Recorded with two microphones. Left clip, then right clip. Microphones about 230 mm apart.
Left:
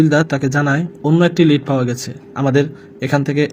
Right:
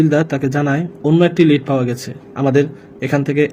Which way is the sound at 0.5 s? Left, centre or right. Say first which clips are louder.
Left 1 dB; left.